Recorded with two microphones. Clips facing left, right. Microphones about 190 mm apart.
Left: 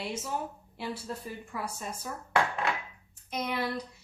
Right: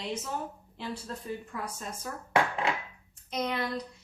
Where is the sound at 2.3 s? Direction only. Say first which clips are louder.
Right 1 dB; 20° right (ahead or behind).